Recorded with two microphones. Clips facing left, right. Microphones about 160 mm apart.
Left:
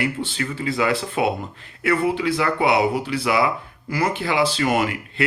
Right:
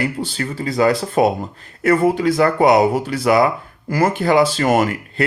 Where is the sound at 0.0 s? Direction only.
40° right (ahead or behind).